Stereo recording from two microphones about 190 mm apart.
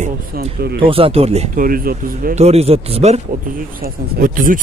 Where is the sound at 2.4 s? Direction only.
35° right (ahead or behind).